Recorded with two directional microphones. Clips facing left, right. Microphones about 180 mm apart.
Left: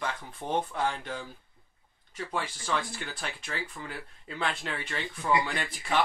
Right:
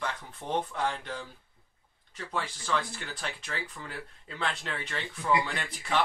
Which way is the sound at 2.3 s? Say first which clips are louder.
Even; 10° left (ahead or behind).